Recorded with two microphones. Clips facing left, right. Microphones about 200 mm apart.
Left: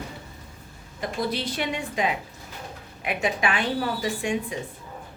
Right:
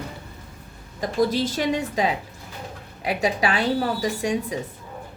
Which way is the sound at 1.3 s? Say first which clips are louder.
Right 5 dB; 40° right (ahead or behind).